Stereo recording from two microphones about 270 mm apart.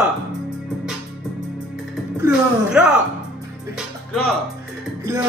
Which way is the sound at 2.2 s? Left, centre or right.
Centre.